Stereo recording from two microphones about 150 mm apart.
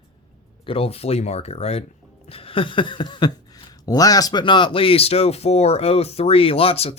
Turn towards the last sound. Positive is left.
turn(degrees=40)  # may be behind; listen again after turning